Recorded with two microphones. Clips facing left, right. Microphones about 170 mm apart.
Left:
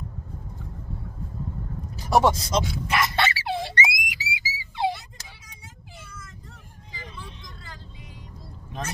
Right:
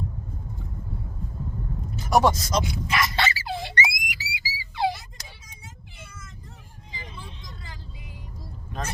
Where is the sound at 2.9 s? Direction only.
60° left (ahead or behind).